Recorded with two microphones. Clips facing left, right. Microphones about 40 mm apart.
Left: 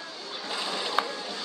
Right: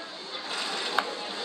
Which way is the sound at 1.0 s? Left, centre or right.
Centre.